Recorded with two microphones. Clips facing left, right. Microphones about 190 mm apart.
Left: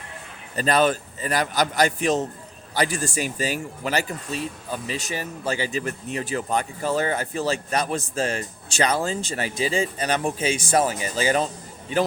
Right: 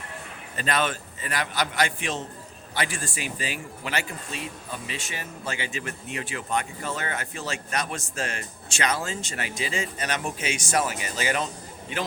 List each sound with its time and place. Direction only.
0.5 s speech: 40° left (ahead or behind)